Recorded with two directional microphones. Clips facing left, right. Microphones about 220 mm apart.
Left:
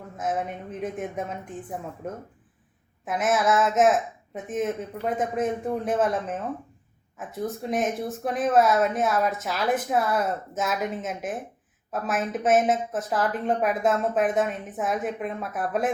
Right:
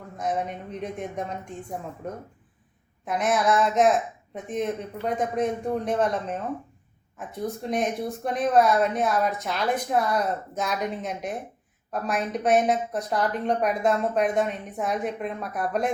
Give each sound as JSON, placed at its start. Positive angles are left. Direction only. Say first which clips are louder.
{"t": 0.2, "sound": "a woman's voice", "louder": "even", "side_deg": 5}